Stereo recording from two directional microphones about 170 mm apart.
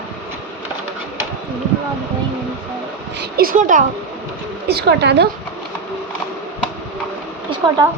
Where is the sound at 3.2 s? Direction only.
60° right (ahead or behind).